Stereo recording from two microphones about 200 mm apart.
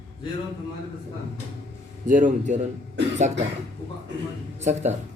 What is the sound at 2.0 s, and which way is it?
Speech, 40° right (ahead or behind).